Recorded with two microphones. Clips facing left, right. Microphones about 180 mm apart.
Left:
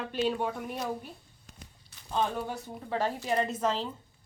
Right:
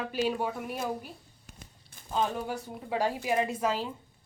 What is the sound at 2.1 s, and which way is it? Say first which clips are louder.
A woman's voice: even; 10° right (ahead or behind).